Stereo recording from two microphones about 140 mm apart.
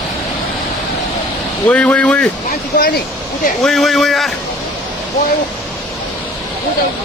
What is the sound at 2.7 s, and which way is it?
Speech, 85° left.